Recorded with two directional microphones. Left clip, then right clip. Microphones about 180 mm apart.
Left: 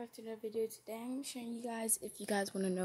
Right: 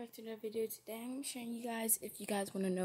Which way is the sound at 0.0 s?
Centre (ahead or behind).